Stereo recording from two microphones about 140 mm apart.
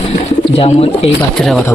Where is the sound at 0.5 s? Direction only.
45° left (ahead or behind).